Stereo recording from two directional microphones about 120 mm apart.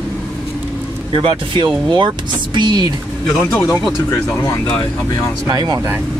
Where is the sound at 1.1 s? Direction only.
45° right (ahead or behind).